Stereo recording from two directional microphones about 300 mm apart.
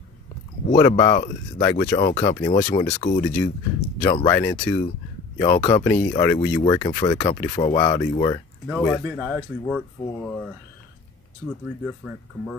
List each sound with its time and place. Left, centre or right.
0.7 s speech: centre
8.6 s speech: centre